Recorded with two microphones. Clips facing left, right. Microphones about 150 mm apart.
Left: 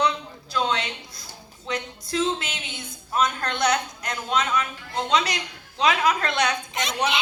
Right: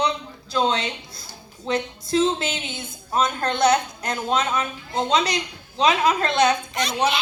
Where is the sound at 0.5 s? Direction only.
25° right (ahead or behind).